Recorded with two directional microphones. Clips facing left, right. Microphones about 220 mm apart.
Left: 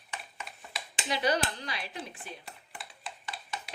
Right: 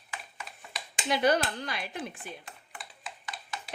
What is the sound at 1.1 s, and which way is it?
A woman's voice, 55° right (ahead or behind).